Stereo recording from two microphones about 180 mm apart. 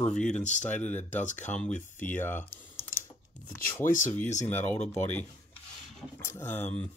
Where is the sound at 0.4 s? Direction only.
40° left (ahead or behind).